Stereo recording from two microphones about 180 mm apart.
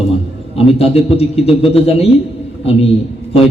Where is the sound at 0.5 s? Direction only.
35° left (ahead or behind).